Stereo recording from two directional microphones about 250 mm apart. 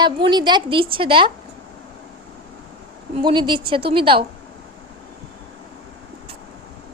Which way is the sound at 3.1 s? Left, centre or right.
Centre.